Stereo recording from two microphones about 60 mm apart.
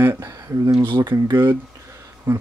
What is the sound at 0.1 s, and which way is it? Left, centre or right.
Speech, right.